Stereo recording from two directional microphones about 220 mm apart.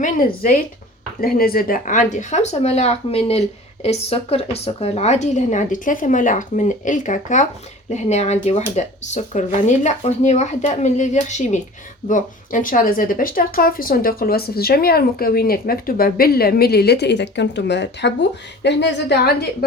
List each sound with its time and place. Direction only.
0.0 s a woman's voice: 40° left (ahead or behind)